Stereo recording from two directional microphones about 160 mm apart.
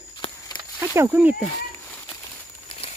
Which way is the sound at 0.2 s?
30° left (ahead or behind).